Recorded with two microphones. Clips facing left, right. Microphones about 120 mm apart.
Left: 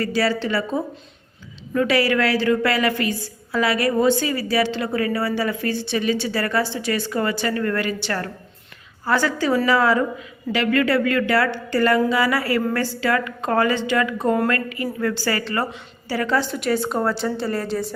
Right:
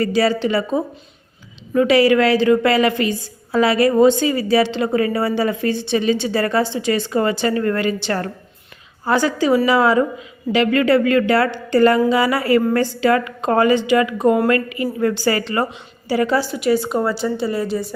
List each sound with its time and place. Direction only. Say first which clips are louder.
0.0 s a woman's voice: right 4 dB; 20° right (ahead or behind); by 17.9 s centre (ahead or behind)